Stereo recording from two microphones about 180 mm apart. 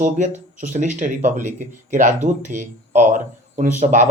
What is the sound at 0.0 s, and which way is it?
A man's voice, 40° right (ahead or behind).